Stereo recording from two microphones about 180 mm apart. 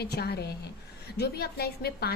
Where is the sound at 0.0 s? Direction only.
65° left (ahead or behind).